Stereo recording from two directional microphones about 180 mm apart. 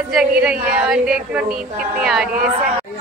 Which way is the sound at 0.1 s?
5° right (ahead or behind).